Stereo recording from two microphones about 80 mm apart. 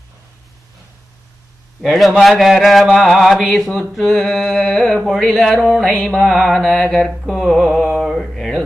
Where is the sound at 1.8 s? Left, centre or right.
Centre.